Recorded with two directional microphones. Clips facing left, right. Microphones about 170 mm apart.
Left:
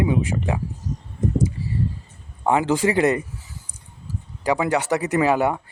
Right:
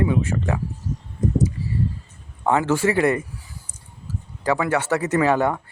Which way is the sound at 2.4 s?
15° left (ahead or behind).